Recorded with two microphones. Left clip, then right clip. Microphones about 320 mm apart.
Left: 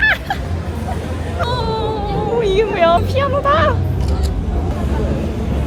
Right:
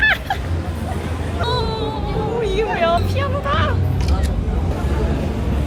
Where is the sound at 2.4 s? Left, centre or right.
Left.